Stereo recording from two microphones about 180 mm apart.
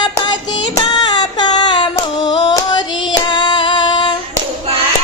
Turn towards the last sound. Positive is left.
turn(degrees=25)  # may be behind; listen again after turning